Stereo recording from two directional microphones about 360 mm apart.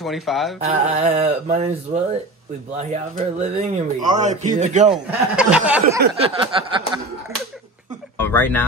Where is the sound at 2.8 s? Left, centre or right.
Centre.